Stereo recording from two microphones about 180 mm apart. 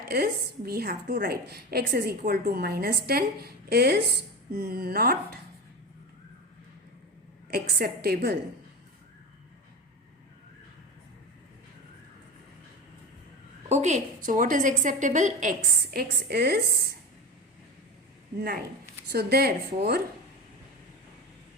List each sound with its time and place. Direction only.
0.1 s a woman's voice: 60° right (ahead or behind)
7.5 s a woman's voice: 60° right (ahead or behind)
13.7 s a woman's voice: 40° right (ahead or behind); by 16.6 s 60° right (ahead or behind)
18.3 s a woman's voice: 55° right (ahead or behind)